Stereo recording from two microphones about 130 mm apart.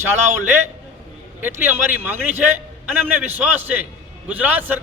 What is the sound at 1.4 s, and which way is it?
A man's voice, 15° right (ahead or behind).